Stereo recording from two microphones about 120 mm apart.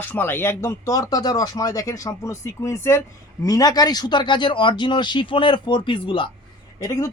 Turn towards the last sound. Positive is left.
turn(degrees=25)  # may be behind; listen again after turning